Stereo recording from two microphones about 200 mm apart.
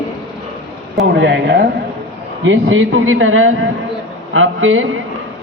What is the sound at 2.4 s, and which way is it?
A man's voice, 75° right (ahead or behind).